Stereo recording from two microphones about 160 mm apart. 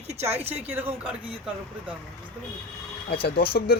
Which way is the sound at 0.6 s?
10° right (ahead or behind).